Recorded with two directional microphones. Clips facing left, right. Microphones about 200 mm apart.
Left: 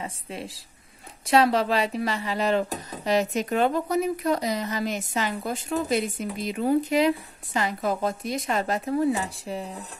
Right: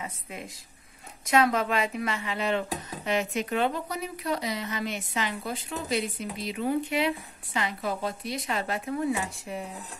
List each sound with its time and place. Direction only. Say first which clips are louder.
0.0 s a woman's voice: left 4 dB; 30° left (ahead or behind)